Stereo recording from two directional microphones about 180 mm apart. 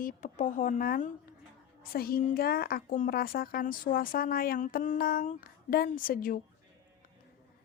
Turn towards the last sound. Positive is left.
turn(degrees=50)  # may be behind; listen again after turning